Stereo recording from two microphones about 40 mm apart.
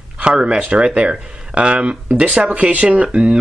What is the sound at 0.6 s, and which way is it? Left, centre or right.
Speech, right.